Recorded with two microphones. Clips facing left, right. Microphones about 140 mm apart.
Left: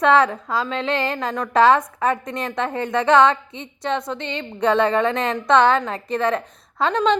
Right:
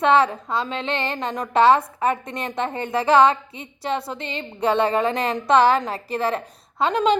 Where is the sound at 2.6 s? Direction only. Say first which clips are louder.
Left 2 dB; 30° right (ahead or behind).